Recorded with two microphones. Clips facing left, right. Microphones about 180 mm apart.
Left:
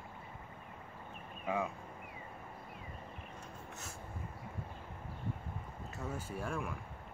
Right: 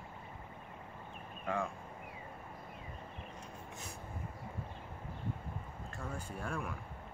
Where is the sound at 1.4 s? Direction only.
5° left (ahead or behind).